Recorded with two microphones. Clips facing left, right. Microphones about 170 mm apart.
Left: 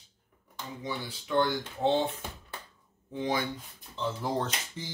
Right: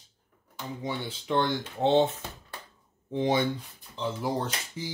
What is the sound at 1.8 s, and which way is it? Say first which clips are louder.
Speech: right 5 dB; 25° right (ahead or behind).